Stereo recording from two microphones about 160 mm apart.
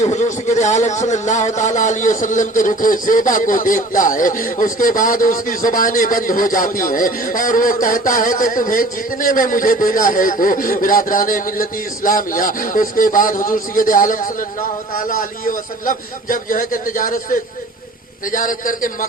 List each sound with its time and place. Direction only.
0.0 s speech: 45° left (ahead or behind)
18.3 s speech: 55° left (ahead or behind)